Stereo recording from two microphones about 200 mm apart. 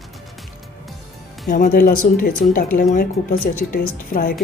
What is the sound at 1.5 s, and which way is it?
Speech, 45° left (ahead or behind).